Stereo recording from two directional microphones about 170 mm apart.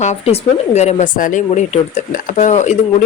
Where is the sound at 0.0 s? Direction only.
40° left (ahead or behind).